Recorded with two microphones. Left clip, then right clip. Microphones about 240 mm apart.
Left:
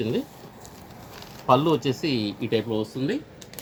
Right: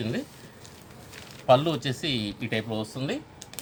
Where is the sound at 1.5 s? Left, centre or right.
Right.